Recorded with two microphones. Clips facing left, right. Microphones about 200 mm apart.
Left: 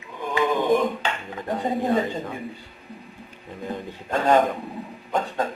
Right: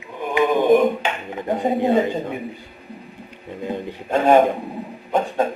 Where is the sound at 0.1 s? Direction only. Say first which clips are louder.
Right 4 dB; 20° right (ahead or behind).